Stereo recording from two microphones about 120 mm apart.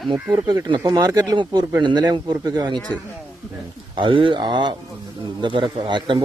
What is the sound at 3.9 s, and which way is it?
A man's voice, 45° right (ahead or behind).